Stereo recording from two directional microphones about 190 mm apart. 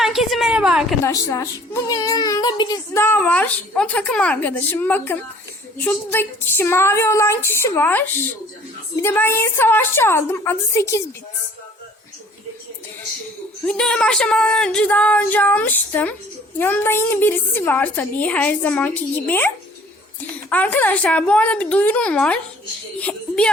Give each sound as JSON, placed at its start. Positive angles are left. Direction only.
{"t": 0.0, "sound": "a sound", "side_deg": 0}
{"t": 1.0, "sound": "speech", "side_deg": 15}
{"t": 13.7, "sound": "speech", "side_deg": 5}
{"t": 20.5, "sound": "speech", "side_deg": 10}